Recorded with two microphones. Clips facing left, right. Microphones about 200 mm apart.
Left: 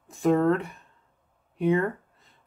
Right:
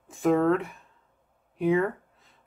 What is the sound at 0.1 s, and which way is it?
Speech, centre (ahead or behind).